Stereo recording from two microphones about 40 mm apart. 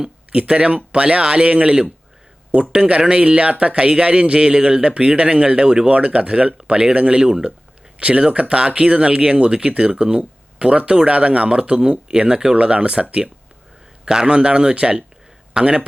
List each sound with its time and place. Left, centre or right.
0.3 s speech: right
7.2 s speech: centre
7.9 s speech: right
14.0 s a man's voice: centre
14.3 s speech: right
15.6 s speech: centre